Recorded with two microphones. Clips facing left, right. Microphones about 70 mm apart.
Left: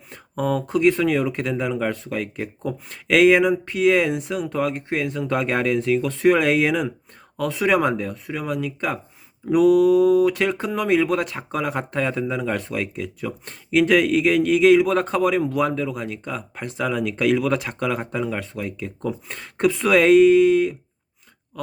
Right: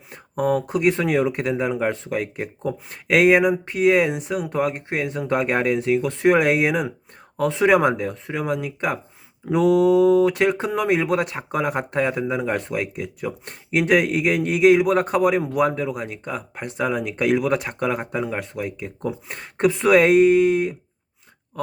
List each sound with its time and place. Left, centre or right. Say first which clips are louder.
0.1 s speech: right 2 dB; centre
2.9 s speech: left 1 dB; centre
7.3 s speech: right 3 dB; right
19.7 s speech: right 4 dB; right
20.0 s speech: left 3 dB; centre